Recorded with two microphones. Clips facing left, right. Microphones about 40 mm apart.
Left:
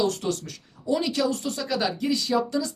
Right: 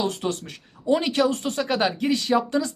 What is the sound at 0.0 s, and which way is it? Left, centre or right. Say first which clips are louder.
Speech: left 1 dB; right.